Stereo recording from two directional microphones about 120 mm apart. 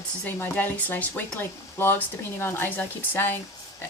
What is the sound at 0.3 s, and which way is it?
Speech, 15° left (ahead or behind).